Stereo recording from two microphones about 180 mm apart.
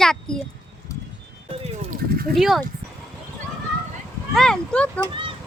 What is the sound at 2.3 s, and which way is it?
Speech, centre (ahead or behind).